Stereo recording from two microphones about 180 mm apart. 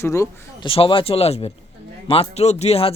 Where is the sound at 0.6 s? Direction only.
30° left (ahead or behind).